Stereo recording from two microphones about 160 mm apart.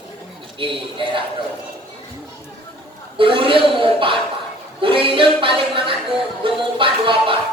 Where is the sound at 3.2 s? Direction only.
35° right (ahead or behind).